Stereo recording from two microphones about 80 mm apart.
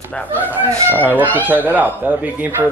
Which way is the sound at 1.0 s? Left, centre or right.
Right.